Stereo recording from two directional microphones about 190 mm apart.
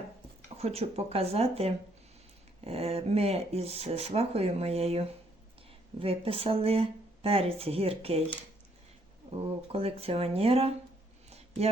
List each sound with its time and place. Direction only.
0.6 s speech: 30° right (ahead or behind)
9.7 s speech: 30° right (ahead or behind)
11.3 s a sound: 35° right (ahead or behind)